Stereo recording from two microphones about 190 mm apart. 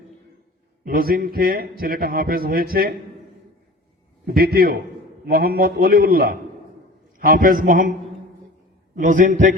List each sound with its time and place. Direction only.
0.9 s a man's voice: 50° right (ahead or behind)
4.3 s a man's voice: 50° right (ahead or behind)
9.0 s a man's voice: 45° right (ahead or behind)